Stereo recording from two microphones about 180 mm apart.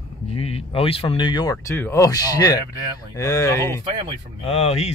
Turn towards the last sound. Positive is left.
turn(degrees=35)  # may be behind; listen again after turning